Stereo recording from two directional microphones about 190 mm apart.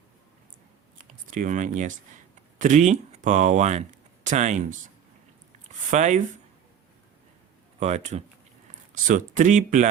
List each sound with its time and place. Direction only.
0.9 s typing: 45° right (ahead or behind)
2.6 s speech: 40° right (ahead or behind)
5.9 s speech: 40° right (ahead or behind)
7.8 s speech: 35° right (ahead or behind)